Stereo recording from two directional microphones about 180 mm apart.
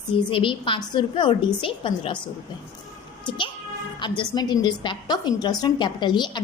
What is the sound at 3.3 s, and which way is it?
A woman's voice, 25° left (ahead or behind).